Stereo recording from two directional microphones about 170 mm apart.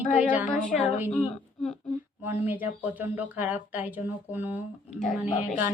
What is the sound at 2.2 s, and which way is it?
Speech, 10° right (ahead or behind).